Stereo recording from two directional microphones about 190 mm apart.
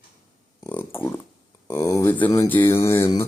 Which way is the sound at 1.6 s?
15° left (ahead or behind).